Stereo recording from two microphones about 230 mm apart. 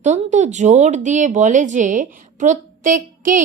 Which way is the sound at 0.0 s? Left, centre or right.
Right.